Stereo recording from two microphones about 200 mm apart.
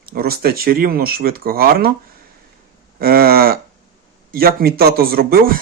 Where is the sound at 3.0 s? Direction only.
50° right (ahead or behind).